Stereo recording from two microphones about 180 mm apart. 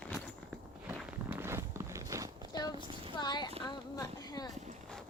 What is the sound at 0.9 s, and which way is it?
Walk, 10° right (ahead or behind).